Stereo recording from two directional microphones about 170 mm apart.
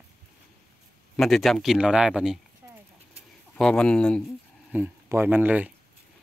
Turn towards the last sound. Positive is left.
turn(degrees=-10)  # may be behind; listen again after turning